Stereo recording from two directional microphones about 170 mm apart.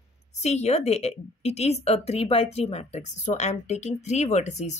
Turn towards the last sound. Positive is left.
turn(degrees=45)  # may be behind; listen again after turning